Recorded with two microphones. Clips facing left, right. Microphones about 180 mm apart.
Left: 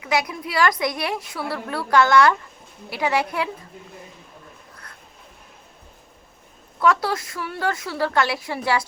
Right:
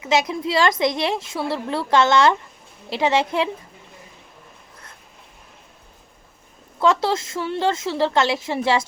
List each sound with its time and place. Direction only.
0.0 s a woman's voice: 25° right (ahead or behind)
6.7 s a woman's voice: 25° right (ahead or behind)